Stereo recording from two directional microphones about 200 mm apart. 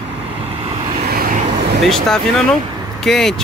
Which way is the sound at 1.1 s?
45° right (ahead or behind).